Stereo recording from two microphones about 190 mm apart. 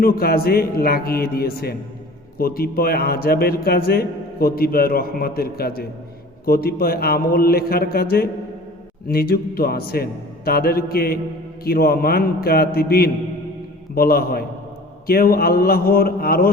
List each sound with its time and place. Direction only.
0.0 s a man's voice: 55° left (ahead or behind)